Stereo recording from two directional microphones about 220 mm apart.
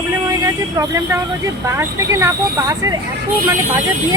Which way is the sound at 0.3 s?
15° right (ahead or behind).